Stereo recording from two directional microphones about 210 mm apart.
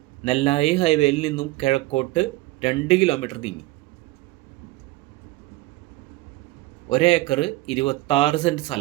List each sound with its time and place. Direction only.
0.3 s speech: 30° left (ahead or behind)
6.8 s speech: 25° left (ahead or behind)